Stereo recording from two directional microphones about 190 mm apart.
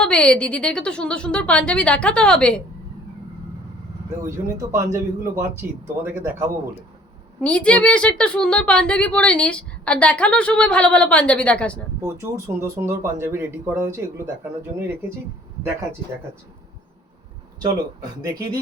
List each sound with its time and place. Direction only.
0.0 s a woman's voice: 5° left (ahead or behind)
4.2 s speech: 15° right (ahead or behind)
7.4 s a woman's voice: 5° left (ahead or behind)
11.9 s speech: 15° right (ahead or behind)
17.6 s speech: 20° right (ahead or behind)